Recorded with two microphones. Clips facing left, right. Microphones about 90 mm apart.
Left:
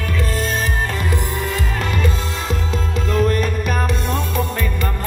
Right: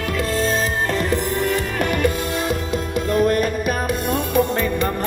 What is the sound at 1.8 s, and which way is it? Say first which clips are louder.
Music: right 3 dB; 60° right (ahead or behind).